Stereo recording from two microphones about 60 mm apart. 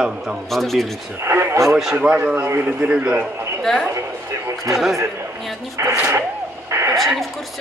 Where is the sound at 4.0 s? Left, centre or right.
Right.